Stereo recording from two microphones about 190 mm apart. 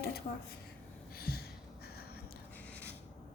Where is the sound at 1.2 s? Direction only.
55° left (ahead or behind).